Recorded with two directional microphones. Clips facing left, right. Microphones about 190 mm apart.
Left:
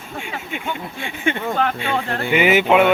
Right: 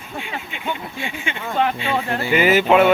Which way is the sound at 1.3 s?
55° left (ahead or behind).